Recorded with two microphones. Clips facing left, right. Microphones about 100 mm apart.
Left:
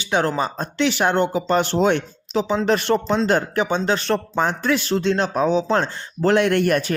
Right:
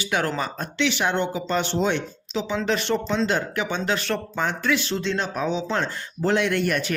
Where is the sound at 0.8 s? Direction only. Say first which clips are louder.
Left 4 dB; 45° left (ahead or behind).